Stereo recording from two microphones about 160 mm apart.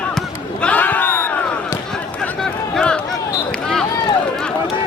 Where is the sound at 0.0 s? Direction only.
5° left (ahead or behind).